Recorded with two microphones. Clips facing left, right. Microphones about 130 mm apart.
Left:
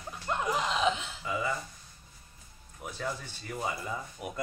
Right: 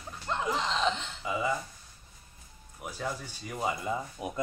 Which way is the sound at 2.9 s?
10° right (ahead or behind).